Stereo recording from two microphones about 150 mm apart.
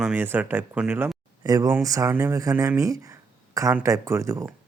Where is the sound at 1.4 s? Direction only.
20° right (ahead or behind).